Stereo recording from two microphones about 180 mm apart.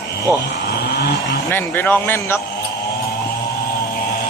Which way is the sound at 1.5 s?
10° left (ahead or behind).